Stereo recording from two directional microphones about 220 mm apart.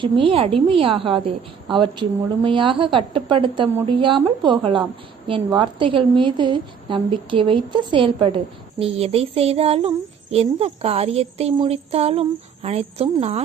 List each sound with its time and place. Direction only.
0.0 s a woman's voice: 25° right (ahead or behind)